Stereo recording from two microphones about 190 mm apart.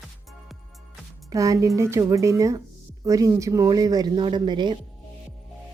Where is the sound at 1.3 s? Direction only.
15° right (ahead or behind).